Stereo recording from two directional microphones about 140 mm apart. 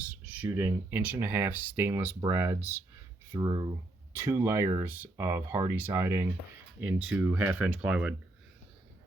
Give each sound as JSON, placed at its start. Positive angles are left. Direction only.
{"t": 0.1, "sound": "a sound", "side_deg": -10}
{"t": 0.5, "sound": "speech", "side_deg": -15}
{"t": 3.3, "sound": "speech", "side_deg": -30}
{"t": 4.1, "sound": "speech", "side_deg": -15}